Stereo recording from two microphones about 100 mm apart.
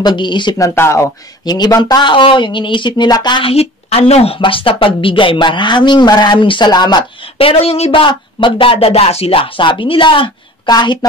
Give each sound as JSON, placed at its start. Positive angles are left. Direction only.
{"t": 0.0, "sound": "speech", "side_deg": 50}
{"t": 0.6, "sound": "speech", "side_deg": 25}
{"t": 1.4, "sound": "speech", "side_deg": 45}
{"t": 3.4, "sound": "a woman's voice", "side_deg": 80}
{"t": 4.4, "sound": "speech", "side_deg": 65}
{"t": 7.3, "sound": "speech", "side_deg": 70}